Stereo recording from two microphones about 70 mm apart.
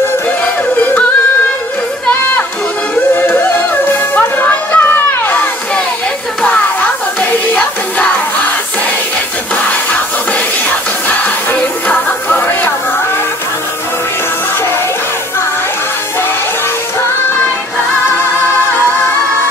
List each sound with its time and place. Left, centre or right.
3.2 s music: left
7.2 s music: centre
11.1 s music: left